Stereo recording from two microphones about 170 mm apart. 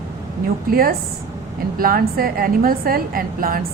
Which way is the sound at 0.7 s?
60° right (ahead or behind).